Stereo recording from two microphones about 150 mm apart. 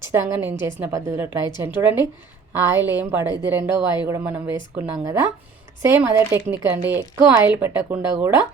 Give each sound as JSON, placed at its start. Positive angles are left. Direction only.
{"t": 0.1, "sound": "a woman's voice", "side_deg": -15}